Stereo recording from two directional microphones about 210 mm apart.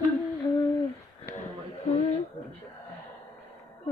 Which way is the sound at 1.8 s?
30° left (ahead or behind).